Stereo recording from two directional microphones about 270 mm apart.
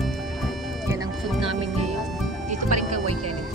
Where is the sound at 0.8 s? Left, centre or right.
Centre.